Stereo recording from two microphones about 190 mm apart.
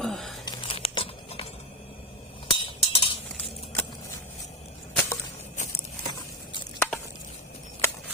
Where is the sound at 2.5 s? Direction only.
30° left (ahead or behind).